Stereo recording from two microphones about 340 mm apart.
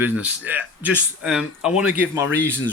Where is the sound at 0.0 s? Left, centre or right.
Centre.